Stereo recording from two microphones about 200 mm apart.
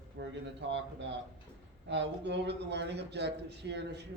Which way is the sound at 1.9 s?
60° right (ahead or behind).